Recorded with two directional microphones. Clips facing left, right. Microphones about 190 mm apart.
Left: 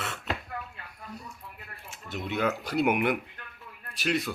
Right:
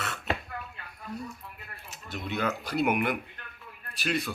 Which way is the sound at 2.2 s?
20° left (ahead or behind).